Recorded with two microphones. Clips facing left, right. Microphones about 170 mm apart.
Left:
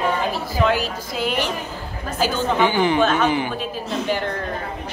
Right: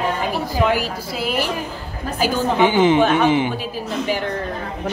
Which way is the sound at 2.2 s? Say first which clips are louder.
Right 2 dB; 15° right (ahead or behind).